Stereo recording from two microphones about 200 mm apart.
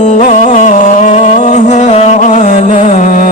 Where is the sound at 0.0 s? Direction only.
35° left (ahead or behind).